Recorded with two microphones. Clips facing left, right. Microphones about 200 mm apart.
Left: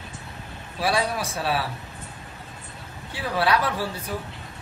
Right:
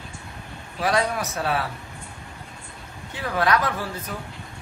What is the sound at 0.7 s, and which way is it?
Speech, 10° left (ahead or behind).